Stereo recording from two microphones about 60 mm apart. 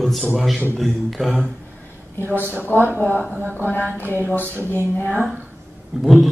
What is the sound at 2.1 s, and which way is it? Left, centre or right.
Speech, left.